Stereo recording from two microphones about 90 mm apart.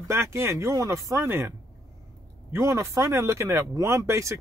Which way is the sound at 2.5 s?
30° right (ahead or behind).